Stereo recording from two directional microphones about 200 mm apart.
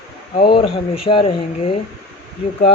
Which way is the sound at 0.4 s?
25° left (ahead or behind).